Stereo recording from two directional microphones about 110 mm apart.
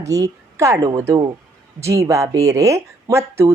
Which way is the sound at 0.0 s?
30° right (ahead or behind).